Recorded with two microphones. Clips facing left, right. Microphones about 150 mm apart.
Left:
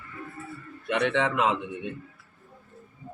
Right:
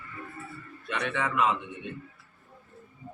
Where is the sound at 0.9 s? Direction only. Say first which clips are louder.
Left 6 dB; 65° left (ahead or behind); by 1.5 s 80° left.